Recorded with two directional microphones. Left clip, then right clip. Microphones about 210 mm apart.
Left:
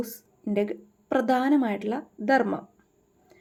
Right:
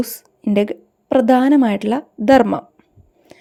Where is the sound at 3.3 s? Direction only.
40° right (ahead or behind).